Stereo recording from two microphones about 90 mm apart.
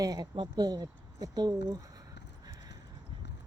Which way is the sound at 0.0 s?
45° right (ahead or behind).